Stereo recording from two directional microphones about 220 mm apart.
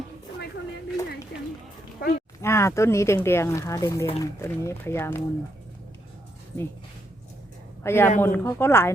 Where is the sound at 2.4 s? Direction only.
10° left (ahead or behind).